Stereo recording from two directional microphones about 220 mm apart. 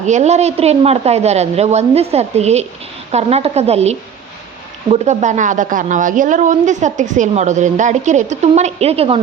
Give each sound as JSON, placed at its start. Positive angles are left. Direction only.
{"t": 0.0, "sound": "a woman's voice", "side_deg": -30}